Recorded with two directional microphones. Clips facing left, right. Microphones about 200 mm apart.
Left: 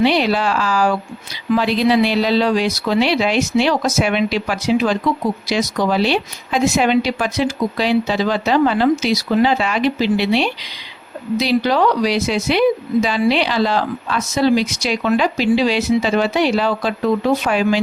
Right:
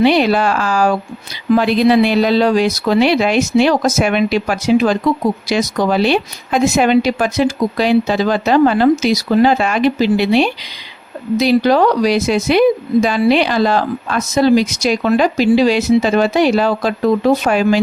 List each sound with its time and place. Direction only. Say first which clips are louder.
0.0 s a woman's voice: right 4 dB; 50° right (ahead or behind)